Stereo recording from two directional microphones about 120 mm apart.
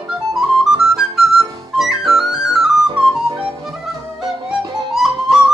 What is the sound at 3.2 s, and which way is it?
Music, 45° right (ahead or behind).